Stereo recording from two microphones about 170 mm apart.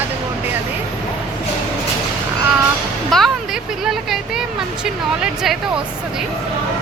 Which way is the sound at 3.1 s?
Centre (ahead or behind).